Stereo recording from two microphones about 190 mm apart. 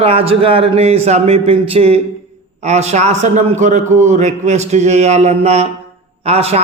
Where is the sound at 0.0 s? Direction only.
30° right (ahead or behind).